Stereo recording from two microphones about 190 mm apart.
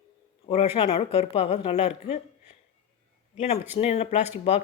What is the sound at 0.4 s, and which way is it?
A man's voice, 35° left (ahead or behind).